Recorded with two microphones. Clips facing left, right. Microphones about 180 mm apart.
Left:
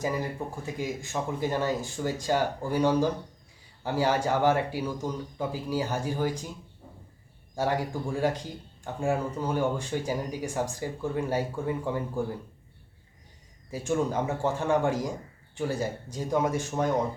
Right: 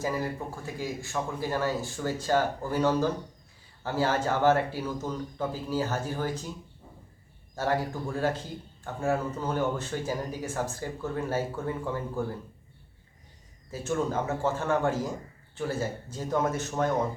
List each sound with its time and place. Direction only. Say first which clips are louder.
0.0 s speech: even; 15° left (ahead or behind)
7.5 s speech: left 1 dB; 15° left (ahead or behind)
13.7 s speech: left 2 dB; 15° left (ahead or behind)